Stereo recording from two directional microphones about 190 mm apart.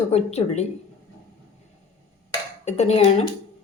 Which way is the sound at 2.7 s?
35° left (ahead or behind).